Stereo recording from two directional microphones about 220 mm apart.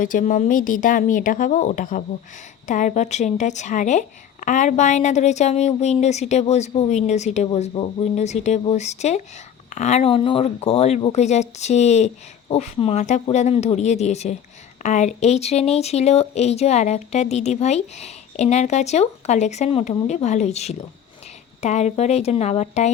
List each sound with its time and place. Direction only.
0.0 s speech: 35° left (ahead or behind)